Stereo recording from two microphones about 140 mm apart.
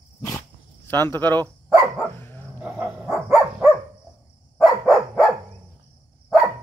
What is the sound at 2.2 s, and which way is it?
Dog, 15° left (ahead or behind).